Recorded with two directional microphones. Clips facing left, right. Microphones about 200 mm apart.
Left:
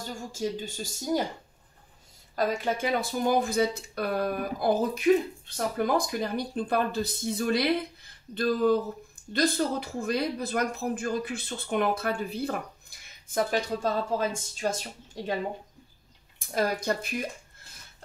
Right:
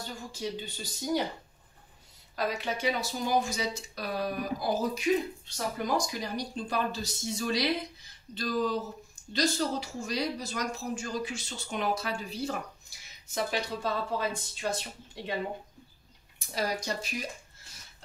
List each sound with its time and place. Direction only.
0.1 s speech: 45° left (ahead or behind)
2.3 s speech: 50° left (ahead or behind)
16.3 s speech: 50° left (ahead or behind)